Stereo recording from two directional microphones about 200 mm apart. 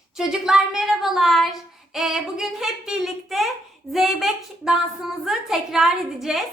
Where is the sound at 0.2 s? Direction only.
5° right (ahead or behind).